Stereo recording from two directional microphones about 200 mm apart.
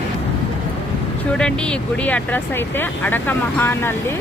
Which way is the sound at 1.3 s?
5° left (ahead or behind).